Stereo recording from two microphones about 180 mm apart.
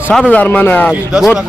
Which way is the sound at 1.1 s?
5° right (ahead or behind).